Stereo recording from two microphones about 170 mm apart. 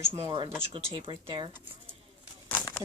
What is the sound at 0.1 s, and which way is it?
Speech, 30° right (ahead or behind).